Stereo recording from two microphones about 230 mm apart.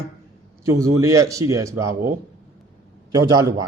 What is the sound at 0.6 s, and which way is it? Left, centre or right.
Speech, centre.